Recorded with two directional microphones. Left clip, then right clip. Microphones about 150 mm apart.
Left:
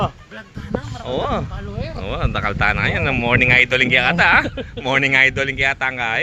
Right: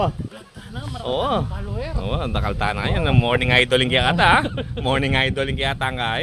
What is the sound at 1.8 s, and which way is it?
Speech, 10° right (ahead or behind).